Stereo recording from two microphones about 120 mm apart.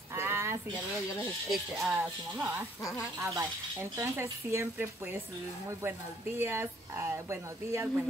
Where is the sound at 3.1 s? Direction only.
25° right (ahead or behind).